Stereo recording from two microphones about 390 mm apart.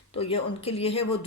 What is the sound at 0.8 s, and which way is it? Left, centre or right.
Speech, centre.